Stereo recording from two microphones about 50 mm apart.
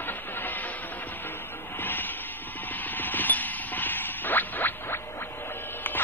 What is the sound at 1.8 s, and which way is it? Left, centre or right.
Vehicle, left.